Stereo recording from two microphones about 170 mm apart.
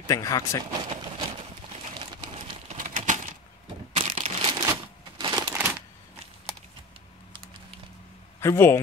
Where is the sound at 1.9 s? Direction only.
30° right (ahead or behind).